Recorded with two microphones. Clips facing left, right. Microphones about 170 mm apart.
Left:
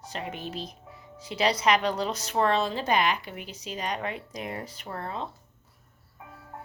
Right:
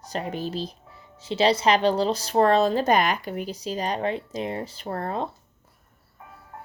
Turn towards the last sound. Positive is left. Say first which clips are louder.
# right 6 dB
turn(degrees=-50)  # may be behind; listen again after turning